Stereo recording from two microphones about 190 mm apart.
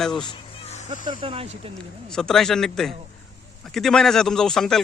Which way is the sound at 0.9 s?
25° right (ahead or behind).